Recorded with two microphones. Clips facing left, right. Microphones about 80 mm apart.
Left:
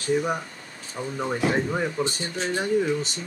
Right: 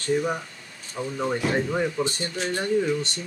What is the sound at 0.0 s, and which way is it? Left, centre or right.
Speech, centre.